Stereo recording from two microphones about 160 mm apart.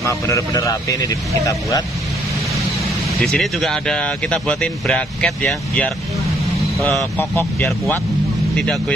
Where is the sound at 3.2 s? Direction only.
Centre (ahead or behind).